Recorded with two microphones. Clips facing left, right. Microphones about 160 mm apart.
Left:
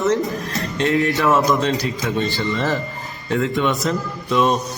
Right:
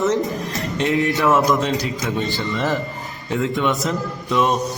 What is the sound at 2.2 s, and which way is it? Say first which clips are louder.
Speech: left 2 dB; 15° right (ahead or behind).